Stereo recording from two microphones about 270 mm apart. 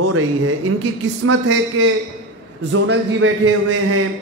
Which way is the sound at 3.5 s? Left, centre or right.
Right.